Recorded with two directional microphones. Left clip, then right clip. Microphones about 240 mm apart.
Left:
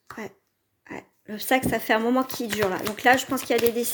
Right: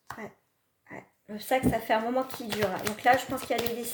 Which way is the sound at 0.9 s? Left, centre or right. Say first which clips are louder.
Left 6 dB; left.